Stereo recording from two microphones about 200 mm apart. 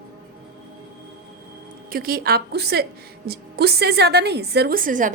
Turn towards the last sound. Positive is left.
turn(degrees=-40)  # may be behind; listen again after turning